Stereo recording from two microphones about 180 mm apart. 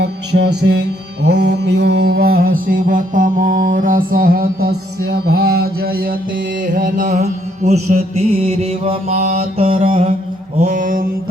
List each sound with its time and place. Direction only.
0.0 s music: 65° right (ahead or behind)
6.7 s mantra: 50° right (ahead or behind); by 10.1 s 30° right (ahead or behind)
10.6 s mantra: 45° right (ahead or behind)